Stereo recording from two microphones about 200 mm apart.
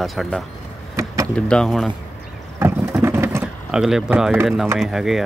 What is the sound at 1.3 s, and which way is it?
Speech, 5° left (ahead or behind).